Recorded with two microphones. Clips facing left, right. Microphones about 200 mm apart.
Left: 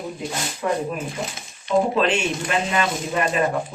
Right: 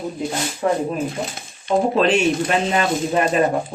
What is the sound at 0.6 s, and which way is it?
Speech, 35° right (ahead or behind).